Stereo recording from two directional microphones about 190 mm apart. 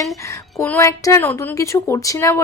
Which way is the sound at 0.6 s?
15° left (ahead or behind).